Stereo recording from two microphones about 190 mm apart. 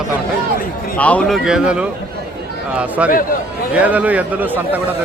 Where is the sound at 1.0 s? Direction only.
5° left (ahead or behind); by 4.8 s 10° right (ahead or behind).